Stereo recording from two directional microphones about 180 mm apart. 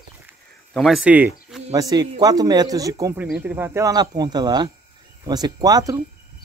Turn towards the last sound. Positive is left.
turn(degrees=-20)  # may be behind; listen again after turning